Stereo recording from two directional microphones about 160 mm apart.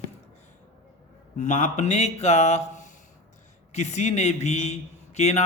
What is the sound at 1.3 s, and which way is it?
A man's voice, 50° left (ahead or behind).